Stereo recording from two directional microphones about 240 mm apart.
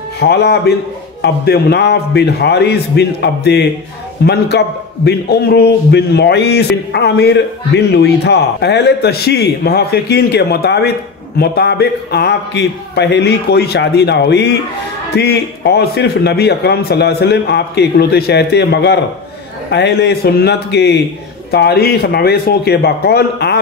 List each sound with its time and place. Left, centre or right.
0.2 s a man's voice: left